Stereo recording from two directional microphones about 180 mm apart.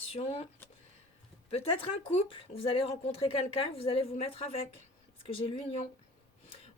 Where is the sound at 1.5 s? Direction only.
30° left (ahead or behind).